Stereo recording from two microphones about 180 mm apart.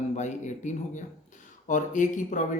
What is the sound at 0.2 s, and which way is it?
Speech, 40° left (ahead or behind).